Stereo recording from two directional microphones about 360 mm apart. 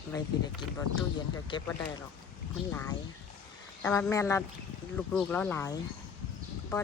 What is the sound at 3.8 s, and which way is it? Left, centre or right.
Speech, centre.